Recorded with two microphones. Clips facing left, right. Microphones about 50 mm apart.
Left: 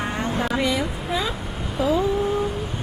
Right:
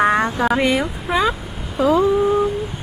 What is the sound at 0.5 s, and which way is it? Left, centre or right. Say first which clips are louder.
Speech: right 5 dB; right.